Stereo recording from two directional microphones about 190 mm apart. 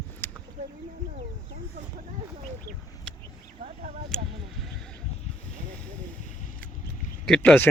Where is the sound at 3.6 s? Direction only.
35° right (ahead or behind).